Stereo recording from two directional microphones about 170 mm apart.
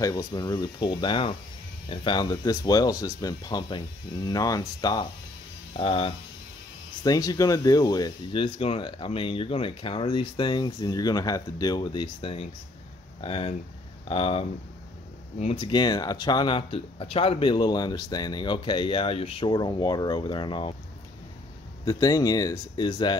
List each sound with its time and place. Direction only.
0.0 s speech: 20° left (ahead or behind)
5.7 s speech: 35° left (ahead or behind)
7.0 s speech: 20° left (ahead or behind)
21.8 s speech: 20° left (ahead or behind)